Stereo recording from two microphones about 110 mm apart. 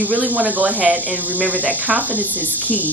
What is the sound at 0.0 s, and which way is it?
A woman's voice, 15° right (ahead or behind).